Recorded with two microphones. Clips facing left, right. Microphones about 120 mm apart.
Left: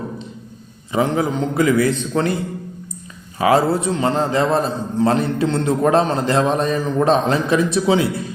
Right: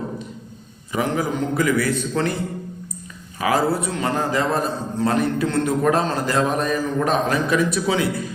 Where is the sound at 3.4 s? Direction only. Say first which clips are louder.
Left 4 dB; 25° left (ahead or behind).